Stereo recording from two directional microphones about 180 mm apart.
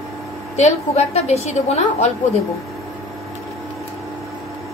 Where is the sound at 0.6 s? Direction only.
35° left (ahead or behind).